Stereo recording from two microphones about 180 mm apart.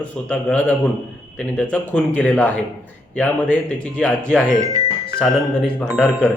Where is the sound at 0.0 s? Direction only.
5° left (ahead or behind).